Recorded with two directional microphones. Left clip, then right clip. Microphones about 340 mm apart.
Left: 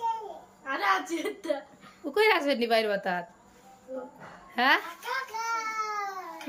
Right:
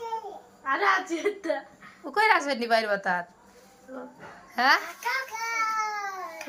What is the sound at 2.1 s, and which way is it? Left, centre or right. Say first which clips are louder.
A woman's voice: right 1 dB; centre.